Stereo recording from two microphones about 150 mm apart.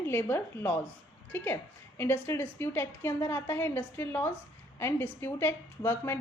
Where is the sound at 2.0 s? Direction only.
15° left (ahead or behind).